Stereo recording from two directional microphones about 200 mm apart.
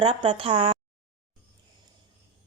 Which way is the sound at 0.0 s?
30° right (ahead or behind).